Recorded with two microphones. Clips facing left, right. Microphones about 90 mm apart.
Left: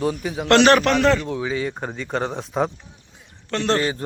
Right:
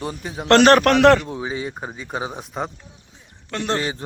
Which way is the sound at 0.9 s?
65° right (ahead or behind).